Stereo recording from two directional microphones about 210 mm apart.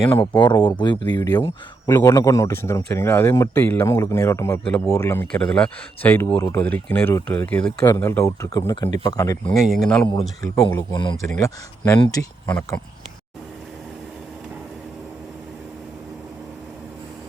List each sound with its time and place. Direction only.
0.2 s speech: 20° left (ahead or behind)
9.5 s speech: centre (ahead or behind)
10.4 s speech: 15° left (ahead or behind)